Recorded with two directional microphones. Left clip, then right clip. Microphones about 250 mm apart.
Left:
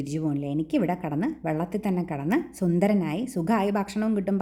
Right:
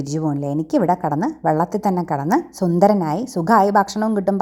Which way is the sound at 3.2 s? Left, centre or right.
Centre.